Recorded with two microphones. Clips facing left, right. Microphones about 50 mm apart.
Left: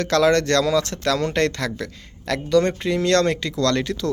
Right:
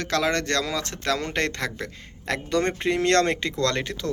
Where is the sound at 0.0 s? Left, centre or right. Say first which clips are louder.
Left 7 dB; centre; by 3.5 s right.